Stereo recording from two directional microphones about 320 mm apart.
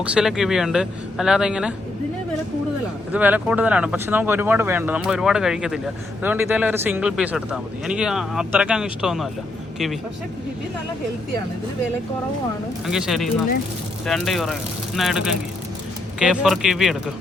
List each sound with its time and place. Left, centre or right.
0.0 s speech: centre
3.1 s speech: centre
12.9 s speech: centre